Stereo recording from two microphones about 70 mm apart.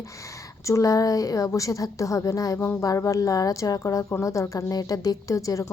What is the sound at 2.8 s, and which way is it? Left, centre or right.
A woman's voice, left.